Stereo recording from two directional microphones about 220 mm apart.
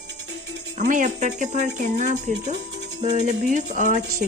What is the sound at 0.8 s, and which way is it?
Speech, 35° right (ahead or behind).